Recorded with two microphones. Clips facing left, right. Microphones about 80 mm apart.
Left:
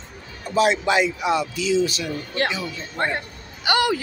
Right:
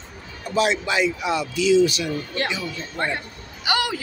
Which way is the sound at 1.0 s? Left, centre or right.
Centre.